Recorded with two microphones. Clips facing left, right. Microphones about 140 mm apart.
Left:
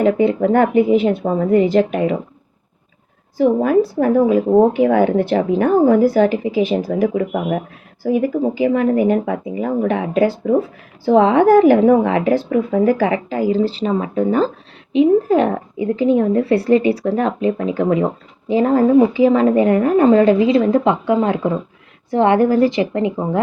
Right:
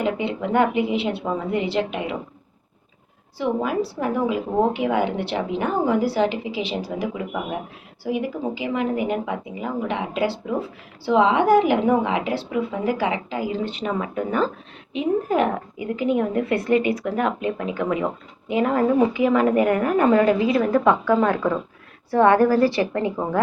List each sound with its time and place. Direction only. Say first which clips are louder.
0.0 s speech: left 10 dB; 45° left (ahead or behind)
3.3 s a woman's voice: left 9 dB; 45° left (ahead or behind); by 23.4 s 20° left (ahead or behind)